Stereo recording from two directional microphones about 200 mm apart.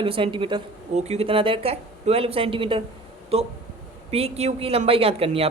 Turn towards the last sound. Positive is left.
turn(degrees=-30)  # may be behind; listen again after turning